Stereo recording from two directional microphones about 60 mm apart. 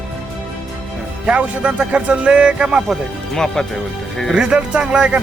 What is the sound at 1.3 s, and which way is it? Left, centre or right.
Speech, right.